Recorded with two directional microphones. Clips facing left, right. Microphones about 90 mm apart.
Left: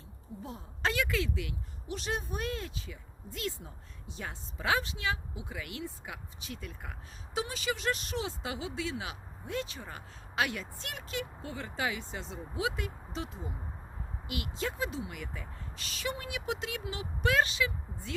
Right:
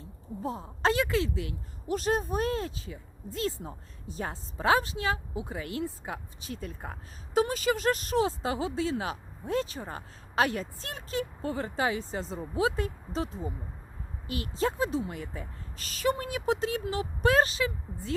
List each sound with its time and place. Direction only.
0.0 s speech: 35° right (ahead or behind)